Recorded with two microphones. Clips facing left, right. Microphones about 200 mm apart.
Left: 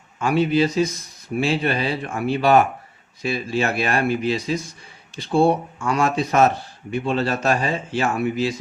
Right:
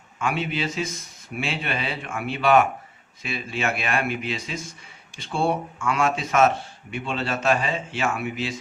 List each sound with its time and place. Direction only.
0.2 s speech: 35° left (ahead or behind)